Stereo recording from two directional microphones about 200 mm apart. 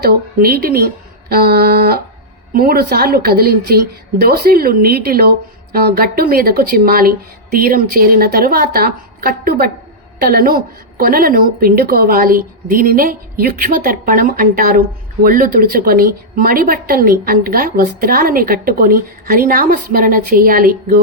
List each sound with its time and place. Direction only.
0.0 s a woman's voice: 50° right (ahead or behind)